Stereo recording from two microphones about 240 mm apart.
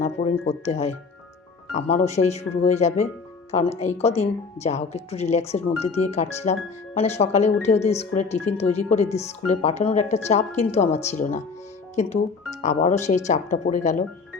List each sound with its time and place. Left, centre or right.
0.0 s speech: left
2.0 s speech: left